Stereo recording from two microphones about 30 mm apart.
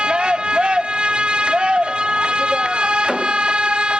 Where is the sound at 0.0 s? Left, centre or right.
Right.